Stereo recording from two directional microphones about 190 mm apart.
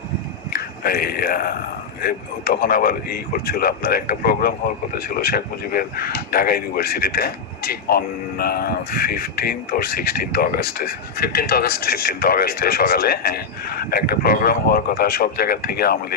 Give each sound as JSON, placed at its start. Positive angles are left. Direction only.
{"t": 0.5, "sound": "speech", "side_deg": 50}